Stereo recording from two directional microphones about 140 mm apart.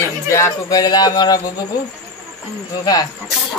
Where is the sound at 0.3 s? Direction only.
25° left (ahead or behind).